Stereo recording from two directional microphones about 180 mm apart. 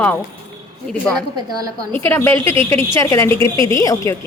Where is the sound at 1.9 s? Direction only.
10° left (ahead or behind).